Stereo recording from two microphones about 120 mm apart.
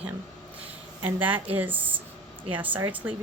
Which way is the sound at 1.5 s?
15° right (ahead or behind).